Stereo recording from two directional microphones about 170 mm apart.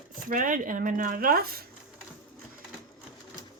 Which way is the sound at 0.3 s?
50° right (ahead or behind).